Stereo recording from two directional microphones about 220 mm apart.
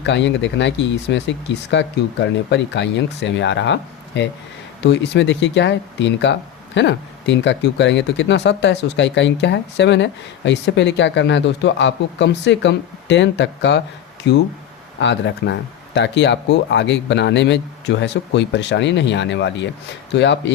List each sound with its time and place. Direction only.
0.0 s speech: 55° left (ahead or behind)